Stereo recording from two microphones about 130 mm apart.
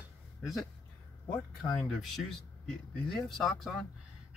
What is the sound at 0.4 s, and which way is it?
Speech, centre (ahead or behind).